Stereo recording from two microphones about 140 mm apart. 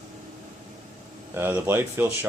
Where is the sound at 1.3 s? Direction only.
15° right (ahead or behind).